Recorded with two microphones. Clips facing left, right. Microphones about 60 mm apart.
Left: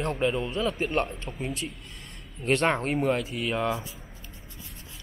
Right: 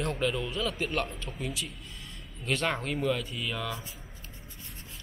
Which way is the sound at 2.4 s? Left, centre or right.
Left.